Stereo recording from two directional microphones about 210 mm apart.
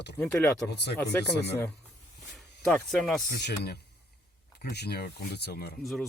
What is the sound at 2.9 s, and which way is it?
Speech, centre (ahead or behind).